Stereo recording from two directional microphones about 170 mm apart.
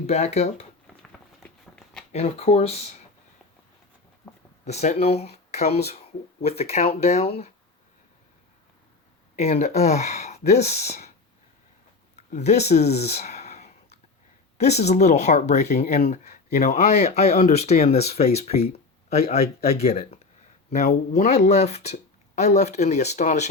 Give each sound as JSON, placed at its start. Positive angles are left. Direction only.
{"t": 0.1, "sound": "speech", "side_deg": 40}
{"t": 1.4, "sound": "walk", "side_deg": 5}
{"t": 2.1, "sound": "speech", "side_deg": 35}
{"t": 4.6, "sound": "speech", "side_deg": 40}
{"t": 9.3, "sound": "speech", "side_deg": 40}
{"t": 12.1, "sound": "a sound", "side_deg": 40}
{"t": 14.6, "sound": "speech", "side_deg": 40}
{"t": 21.1, "sound": "speech", "side_deg": 65}
{"t": 21.3, "sound": "speech", "side_deg": 40}